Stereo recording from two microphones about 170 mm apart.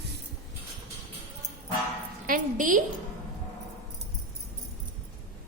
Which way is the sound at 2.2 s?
50° right (ahead or behind).